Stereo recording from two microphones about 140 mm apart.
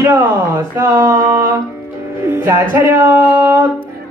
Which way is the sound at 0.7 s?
20° right (ahead or behind).